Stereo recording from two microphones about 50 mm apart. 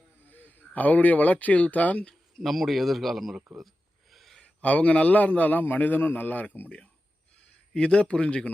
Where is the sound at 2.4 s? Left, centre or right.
Centre.